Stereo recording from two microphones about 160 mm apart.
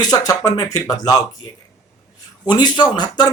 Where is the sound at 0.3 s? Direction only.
25° left (ahead or behind).